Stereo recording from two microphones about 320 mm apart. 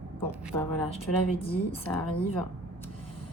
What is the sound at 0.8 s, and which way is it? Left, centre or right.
Speech, centre.